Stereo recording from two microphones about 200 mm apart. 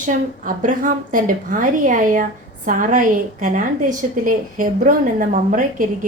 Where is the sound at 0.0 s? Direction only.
40° right (ahead or behind).